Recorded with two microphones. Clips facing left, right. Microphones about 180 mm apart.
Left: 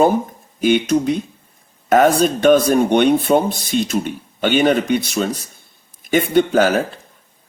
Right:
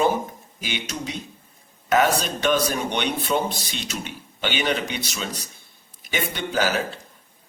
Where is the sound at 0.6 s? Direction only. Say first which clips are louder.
Left 16 dB; 50° left (ahead or behind).